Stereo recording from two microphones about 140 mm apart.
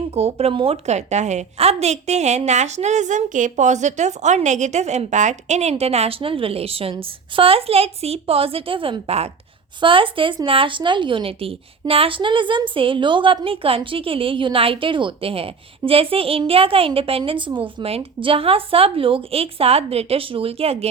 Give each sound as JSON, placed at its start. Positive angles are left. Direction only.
{"t": 0.1, "sound": "a woman's voice", "side_deg": -45}
{"t": 9.8, "sound": "a woman's voice", "side_deg": -40}